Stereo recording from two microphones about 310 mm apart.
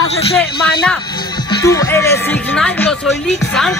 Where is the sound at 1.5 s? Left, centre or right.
Centre.